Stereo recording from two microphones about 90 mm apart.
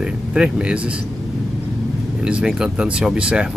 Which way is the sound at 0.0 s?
10° right (ahead or behind).